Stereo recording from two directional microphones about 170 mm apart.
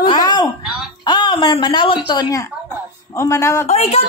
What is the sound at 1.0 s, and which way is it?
A woman's voice, 25° left (ahead or behind).